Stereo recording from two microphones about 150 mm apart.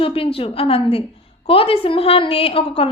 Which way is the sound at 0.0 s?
40° left (ahead or behind).